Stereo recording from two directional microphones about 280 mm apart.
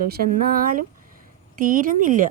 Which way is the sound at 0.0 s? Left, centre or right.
Right.